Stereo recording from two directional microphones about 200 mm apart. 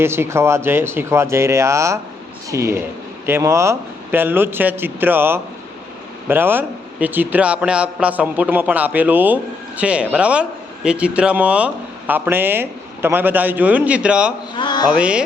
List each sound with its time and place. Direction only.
0.0 s a man's voice: 10° right (ahead or behind)
14.5 s a sound: 20° left (ahead or behind)
14.8 s mantra: 5° right (ahead or behind)